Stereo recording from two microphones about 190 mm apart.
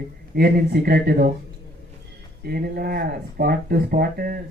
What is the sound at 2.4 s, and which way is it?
Speech, 55° right (ahead or behind).